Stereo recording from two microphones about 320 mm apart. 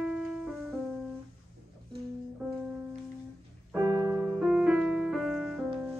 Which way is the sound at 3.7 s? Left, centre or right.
Centre.